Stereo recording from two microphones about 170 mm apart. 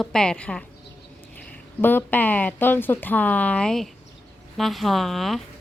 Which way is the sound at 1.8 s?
10° left (ahead or behind).